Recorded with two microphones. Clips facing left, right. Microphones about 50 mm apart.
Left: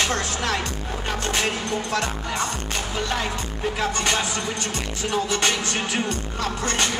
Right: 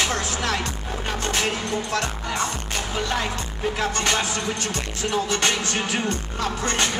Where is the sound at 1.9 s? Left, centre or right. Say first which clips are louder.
Even; centre.